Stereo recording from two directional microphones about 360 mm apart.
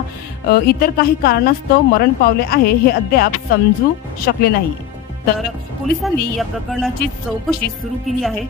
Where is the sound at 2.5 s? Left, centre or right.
Left.